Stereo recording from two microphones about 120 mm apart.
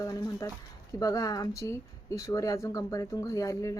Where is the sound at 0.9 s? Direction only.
30° left (ahead or behind).